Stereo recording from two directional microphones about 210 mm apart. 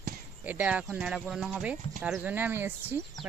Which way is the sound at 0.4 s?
5° right (ahead or behind).